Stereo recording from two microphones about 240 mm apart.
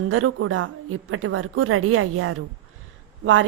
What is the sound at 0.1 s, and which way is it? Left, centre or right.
Speech, right.